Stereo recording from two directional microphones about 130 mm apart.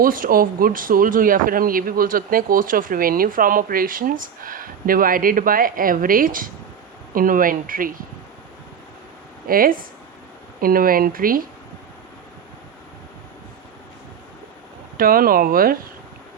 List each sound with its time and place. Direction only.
0.0 s speech: 90° right
9.5 s speech: 90° right
14.9 s speech: 90° right